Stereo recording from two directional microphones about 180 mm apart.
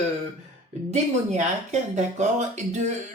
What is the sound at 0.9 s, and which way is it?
Speech, 40° right (ahead or behind).